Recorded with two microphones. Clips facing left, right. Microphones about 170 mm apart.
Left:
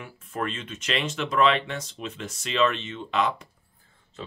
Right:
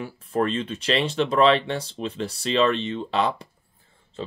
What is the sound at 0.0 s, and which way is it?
Speech, 35° right (ahead or behind).